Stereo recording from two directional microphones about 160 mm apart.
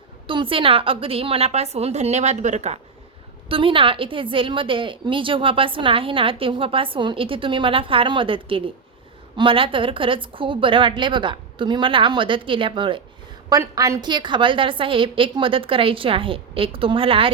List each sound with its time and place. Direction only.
0.3 s a woman's voice: 35° right (ahead or behind)
3.5 s a woman's voice: 35° right (ahead or behind)